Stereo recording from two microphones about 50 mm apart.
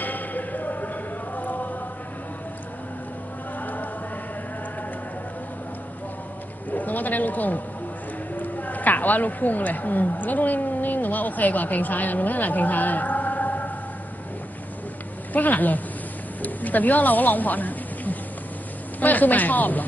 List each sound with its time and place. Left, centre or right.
0.0 s a sound: left
1.3 s chant: left
3.6 s chant: left
6.7 s a man's voice: left
15.3 s speech: left